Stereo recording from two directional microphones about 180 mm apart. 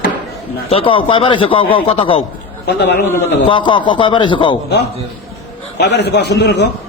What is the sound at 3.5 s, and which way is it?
A man's voice, 25° left (ahead or behind).